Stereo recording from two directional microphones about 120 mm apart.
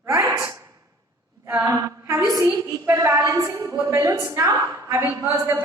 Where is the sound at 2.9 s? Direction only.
30° right (ahead or behind).